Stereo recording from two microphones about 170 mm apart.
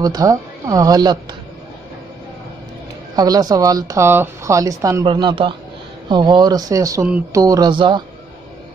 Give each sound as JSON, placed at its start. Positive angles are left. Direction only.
{"t": 0.0, "sound": "speech", "side_deg": -20}
{"t": 3.2, "sound": "speech", "side_deg": -20}